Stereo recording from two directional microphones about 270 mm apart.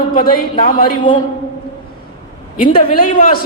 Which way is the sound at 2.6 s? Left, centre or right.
Left.